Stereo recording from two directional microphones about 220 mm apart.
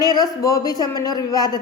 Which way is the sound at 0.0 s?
15° left (ahead or behind).